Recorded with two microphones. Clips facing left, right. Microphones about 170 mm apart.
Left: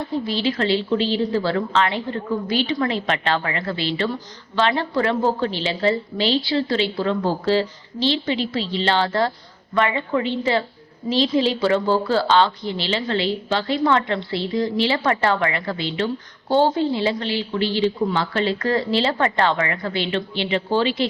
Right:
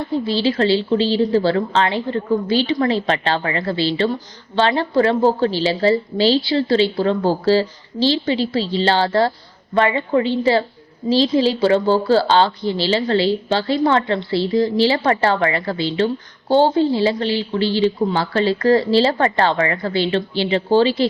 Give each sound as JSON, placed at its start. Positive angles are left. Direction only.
{"t": 0.3, "sound": "speech", "side_deg": -30}